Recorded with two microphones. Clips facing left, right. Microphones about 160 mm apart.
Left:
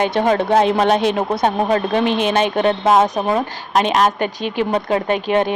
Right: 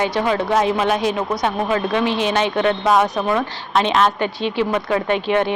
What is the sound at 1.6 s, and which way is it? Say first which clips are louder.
Speech: left 2 dB; 40° left (ahead or behind).